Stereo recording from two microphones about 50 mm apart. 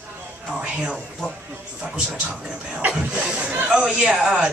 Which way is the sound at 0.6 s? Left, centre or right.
Centre.